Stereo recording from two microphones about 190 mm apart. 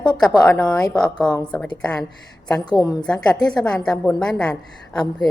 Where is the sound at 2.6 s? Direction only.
20° left (ahead or behind).